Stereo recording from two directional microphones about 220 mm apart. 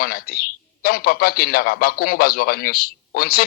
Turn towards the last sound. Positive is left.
turn(degrees=40)  # may be behind; listen again after turning